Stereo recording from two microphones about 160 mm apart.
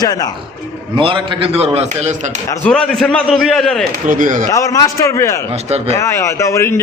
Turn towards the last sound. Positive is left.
turn(degrees=15)  # may be behind; listen again after turning